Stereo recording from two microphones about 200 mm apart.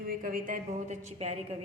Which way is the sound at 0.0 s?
45° right (ahead or behind).